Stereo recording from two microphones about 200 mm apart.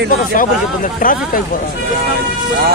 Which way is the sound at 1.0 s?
45° left (ahead or behind).